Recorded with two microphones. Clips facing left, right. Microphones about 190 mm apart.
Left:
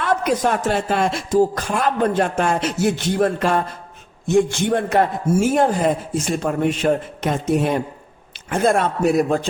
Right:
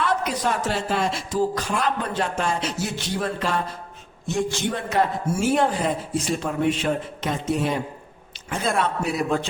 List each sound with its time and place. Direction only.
0.0 s speech: 50° left (ahead or behind)